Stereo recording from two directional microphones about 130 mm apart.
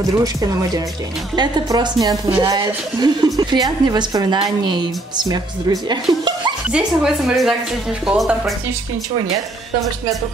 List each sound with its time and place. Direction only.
0.2 s a woman's voice: 25° right (ahead or behind)
6.7 s speech: 5° right (ahead or behind)